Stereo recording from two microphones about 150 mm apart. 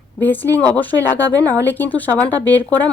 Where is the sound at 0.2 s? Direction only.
10° left (ahead or behind).